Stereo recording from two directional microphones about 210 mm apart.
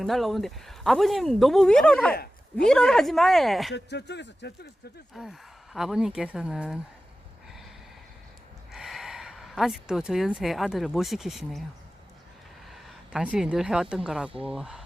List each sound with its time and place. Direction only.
0.0 s speech: centre (ahead or behind)
3.8 s speech: 55° left (ahead or behind)
5.1 s speech: centre (ahead or behind)
8.7 s speech: centre (ahead or behind)
12.7 s speech: 5° right (ahead or behind)